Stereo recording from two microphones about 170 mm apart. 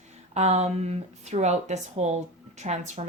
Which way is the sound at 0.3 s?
40° right (ahead or behind).